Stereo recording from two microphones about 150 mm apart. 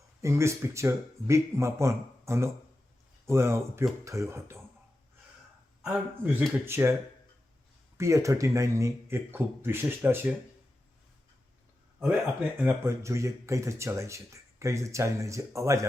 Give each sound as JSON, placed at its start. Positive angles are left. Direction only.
{"t": 0.2, "sound": "speech", "side_deg": -20}
{"t": 5.8, "sound": "speech", "side_deg": -5}
{"t": 7.9, "sound": "speech", "side_deg": -20}
{"t": 12.5, "sound": "speech", "side_deg": -15}